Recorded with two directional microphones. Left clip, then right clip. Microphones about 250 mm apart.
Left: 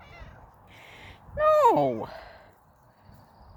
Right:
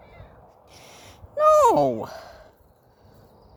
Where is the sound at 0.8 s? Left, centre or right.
Right.